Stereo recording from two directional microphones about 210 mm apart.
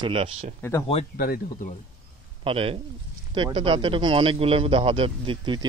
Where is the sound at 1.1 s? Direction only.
45° left (ahead or behind).